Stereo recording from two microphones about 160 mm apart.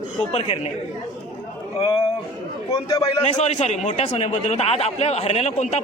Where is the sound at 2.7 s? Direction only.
20° left (ahead or behind).